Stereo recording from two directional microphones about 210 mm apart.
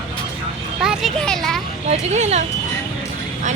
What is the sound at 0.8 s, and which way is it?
Speech, centre (ahead or behind).